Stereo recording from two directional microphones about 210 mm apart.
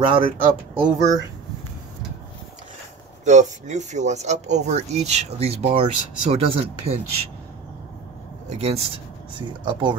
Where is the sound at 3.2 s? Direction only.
35° right (ahead or behind).